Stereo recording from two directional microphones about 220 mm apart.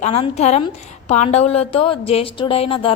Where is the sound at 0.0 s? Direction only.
30° left (ahead or behind).